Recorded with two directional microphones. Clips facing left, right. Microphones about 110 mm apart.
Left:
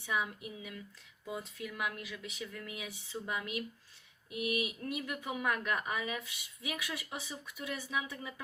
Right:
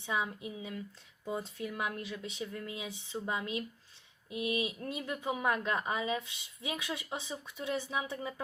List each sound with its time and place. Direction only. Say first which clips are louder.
0.0 s speech: right 1 dB; 25° right (ahead or behind)